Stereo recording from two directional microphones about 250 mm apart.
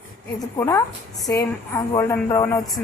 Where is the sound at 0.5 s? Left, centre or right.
Centre.